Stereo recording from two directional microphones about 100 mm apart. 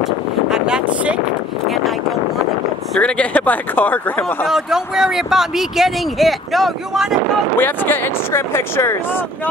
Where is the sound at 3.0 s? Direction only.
15° left (ahead or behind).